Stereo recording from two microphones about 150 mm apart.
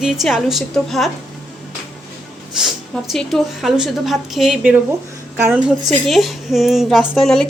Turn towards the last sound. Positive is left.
turn(degrees=5)  # may be behind; listen again after turning